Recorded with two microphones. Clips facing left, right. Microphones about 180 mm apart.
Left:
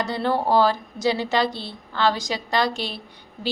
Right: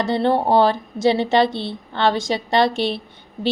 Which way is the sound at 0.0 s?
25° right (ahead or behind).